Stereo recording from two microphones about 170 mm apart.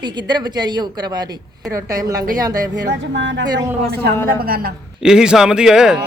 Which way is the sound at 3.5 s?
70° right (ahead or behind).